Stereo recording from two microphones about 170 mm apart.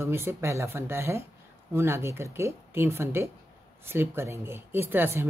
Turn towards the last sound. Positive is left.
turn(degrees=-15)  # may be behind; listen again after turning